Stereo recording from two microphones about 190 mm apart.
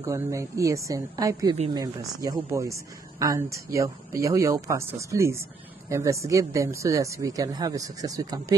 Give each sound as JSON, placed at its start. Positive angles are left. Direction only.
{"t": 0.0, "sound": "speech", "side_deg": -15}